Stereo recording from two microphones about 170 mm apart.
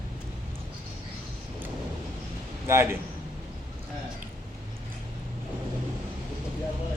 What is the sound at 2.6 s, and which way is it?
Speech, 15° right (ahead or behind).